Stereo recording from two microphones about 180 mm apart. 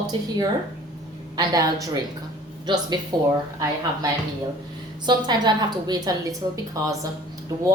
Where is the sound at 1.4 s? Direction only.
20° right (ahead or behind).